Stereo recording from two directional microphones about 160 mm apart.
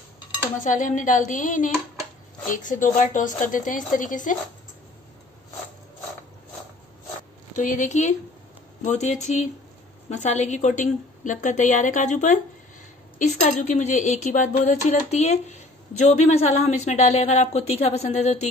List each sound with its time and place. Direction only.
0.6 s speech: 55° left (ahead or behind)
7.5 s a woman's voice: 55° left (ahead or behind)